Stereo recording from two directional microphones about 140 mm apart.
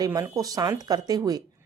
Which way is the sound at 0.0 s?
25° right (ahead or behind).